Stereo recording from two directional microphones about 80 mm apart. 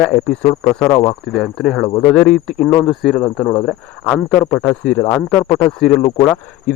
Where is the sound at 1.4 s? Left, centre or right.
Centre.